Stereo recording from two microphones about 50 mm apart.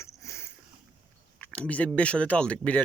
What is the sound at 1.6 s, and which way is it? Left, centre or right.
Speech, left.